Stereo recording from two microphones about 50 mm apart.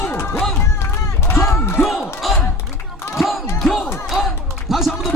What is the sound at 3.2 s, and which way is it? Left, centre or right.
Crowd, centre.